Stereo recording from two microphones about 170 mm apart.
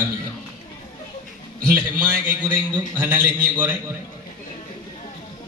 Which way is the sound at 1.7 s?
10° right (ahead or behind).